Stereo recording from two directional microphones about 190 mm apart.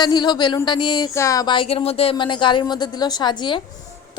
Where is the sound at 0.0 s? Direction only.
25° left (ahead or behind).